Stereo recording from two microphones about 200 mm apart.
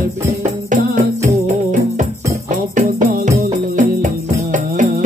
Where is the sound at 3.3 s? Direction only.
40° right (ahead or behind).